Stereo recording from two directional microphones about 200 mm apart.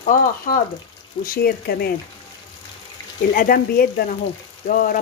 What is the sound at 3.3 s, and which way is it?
Speech, 45° left (ahead or behind).